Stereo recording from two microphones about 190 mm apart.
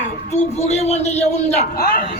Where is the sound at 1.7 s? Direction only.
55° left (ahead or behind).